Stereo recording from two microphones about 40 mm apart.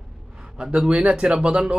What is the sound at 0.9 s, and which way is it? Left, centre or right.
Speech, right.